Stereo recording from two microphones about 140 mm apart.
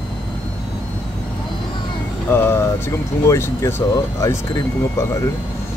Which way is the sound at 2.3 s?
15° left (ahead or behind).